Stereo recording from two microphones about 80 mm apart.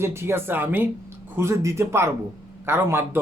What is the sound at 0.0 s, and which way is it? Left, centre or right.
Speech, right.